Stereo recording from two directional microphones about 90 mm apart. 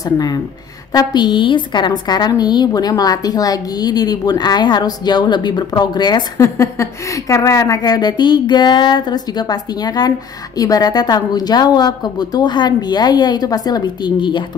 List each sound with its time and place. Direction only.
0.9 s a woman's voice: 60° left (ahead or behind)
6.3 s a woman's voice: 35° left (ahead or behind); by 14.4 s 55° left (ahead or behind)